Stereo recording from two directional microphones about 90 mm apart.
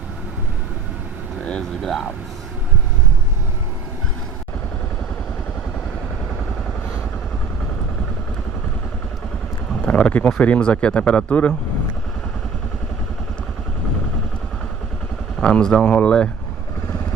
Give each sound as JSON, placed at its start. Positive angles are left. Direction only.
{"t": 1.4, "sound": "vehicle", "side_deg": 10}
{"t": 1.8, "sound": "speech", "side_deg": 0}
{"t": 9.8, "sound": "a sound", "side_deg": 15}
{"t": 10.3, "sound": "speech", "side_deg": 15}
{"t": 15.4, "sound": "speech", "side_deg": 10}